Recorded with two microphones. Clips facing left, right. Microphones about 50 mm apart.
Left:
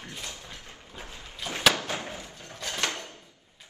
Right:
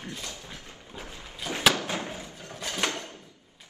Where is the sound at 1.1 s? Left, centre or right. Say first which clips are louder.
Right 1 dB; right.